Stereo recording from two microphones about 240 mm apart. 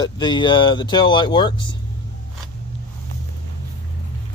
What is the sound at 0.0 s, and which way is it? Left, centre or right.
Speech, centre.